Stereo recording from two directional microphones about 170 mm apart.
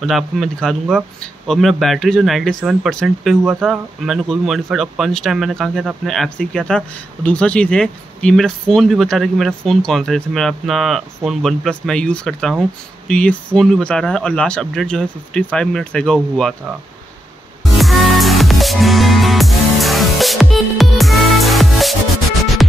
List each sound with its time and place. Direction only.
0.0 s speech: centre (ahead or behind)
17.6 s music: centre (ahead or behind)